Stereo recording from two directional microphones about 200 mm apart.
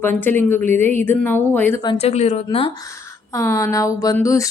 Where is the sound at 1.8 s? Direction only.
25° left (ahead or behind).